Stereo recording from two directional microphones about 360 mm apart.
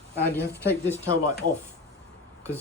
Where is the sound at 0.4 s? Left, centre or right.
Centre.